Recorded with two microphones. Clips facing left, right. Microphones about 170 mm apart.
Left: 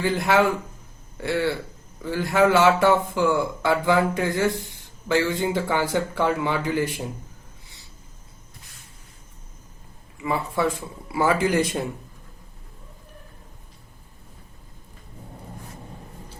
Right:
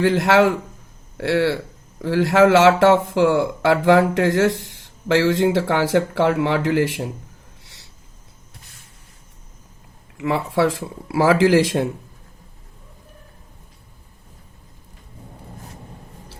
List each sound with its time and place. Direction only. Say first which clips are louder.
0.0 s speech: right 5 dB; 85° right
7.6 s a sound: right 1 dB; 85° right
10.2 s speech: right 5 dB; 90° right